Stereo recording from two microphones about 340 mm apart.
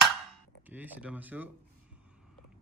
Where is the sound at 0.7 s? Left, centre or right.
Centre.